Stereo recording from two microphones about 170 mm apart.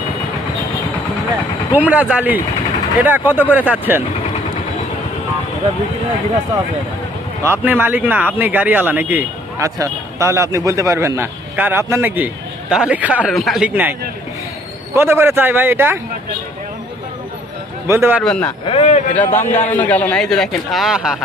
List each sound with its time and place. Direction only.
1.7 s speech: 10° right (ahead or behind)
7.4 s a man's voice: 10° right (ahead or behind)
14.9 s speech: 15° right (ahead or behind)
17.8 s speech: 15° right (ahead or behind)
18.2 s a man's voice: 5° left (ahead or behind)
18.6 s speech: 35° left (ahead or behind)
19.1 s a man's voice: 10° left (ahead or behind)